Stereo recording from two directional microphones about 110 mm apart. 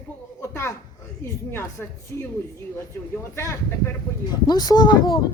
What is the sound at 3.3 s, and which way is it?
Speech, 25° left (ahead or behind).